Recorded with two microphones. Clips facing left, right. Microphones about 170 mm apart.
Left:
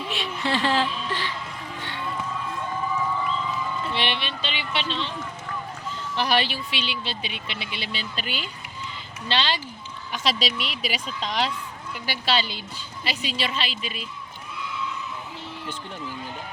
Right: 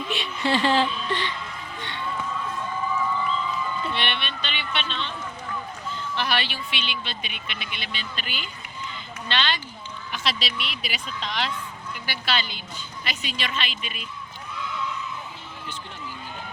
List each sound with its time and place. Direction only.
0.1 s speech: centre (ahead or behind)
3.9 s speech: 25° left (ahead or behind)
6.1 s speech: 35° left (ahead or behind)